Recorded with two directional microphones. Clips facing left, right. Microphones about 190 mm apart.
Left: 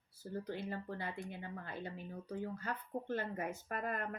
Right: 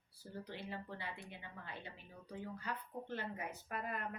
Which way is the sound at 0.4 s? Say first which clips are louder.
Left 4 dB; 45° left (ahead or behind).